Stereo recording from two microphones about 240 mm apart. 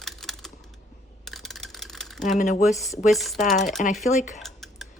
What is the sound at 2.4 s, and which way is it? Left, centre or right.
Speech, left.